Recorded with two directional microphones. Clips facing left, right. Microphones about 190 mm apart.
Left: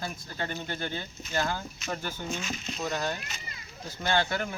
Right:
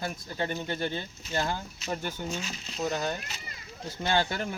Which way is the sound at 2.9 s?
20° right (ahead or behind).